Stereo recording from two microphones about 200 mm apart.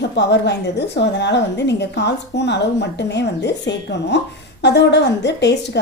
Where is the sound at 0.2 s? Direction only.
60° left (ahead or behind).